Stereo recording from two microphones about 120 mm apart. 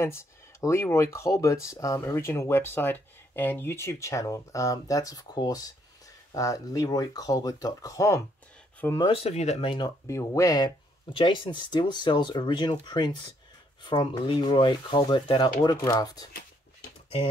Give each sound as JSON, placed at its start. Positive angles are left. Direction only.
{"t": 0.0, "sound": "speech", "side_deg": 25}
{"t": 9.0, "sound": "speech", "side_deg": 55}
{"t": 10.0, "sound": "speech", "side_deg": 25}
{"t": 11.1, "sound": "speech", "side_deg": 45}